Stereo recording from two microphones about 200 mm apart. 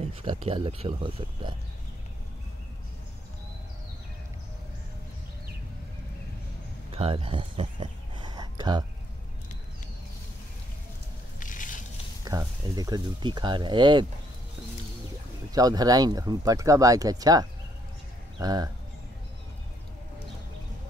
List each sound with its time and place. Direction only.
0.0 s speech: 25° right (ahead or behind)
6.9 s a sound: 30° right (ahead or behind)
11.3 s crushing: 40° left (ahead or behind)
12.3 s speech: 20° right (ahead or behind)
15.5 s speech: 20° right (ahead or behind)